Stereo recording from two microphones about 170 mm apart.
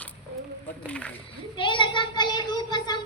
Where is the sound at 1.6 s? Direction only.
30° left (ahead or behind).